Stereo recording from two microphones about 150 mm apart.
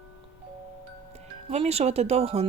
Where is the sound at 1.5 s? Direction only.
45° right (ahead or behind).